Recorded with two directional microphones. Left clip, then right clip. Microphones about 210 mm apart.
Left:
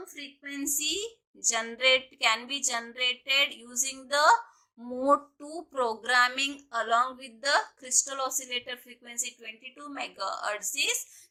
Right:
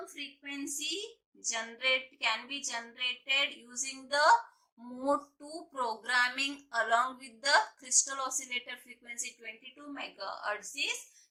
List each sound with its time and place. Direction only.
0.1 s a woman's voice: 50° left (ahead or behind)